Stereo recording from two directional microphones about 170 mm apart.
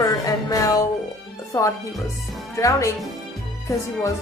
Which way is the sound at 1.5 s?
15° left (ahead or behind).